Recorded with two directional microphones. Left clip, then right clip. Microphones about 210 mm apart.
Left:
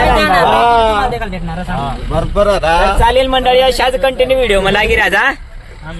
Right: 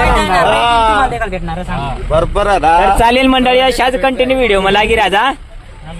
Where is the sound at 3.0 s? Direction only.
40° right (ahead or behind); by 5.3 s 15° right (ahead or behind).